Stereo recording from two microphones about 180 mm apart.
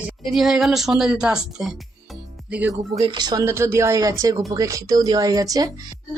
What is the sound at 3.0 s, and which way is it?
Speech, 25° right (ahead or behind).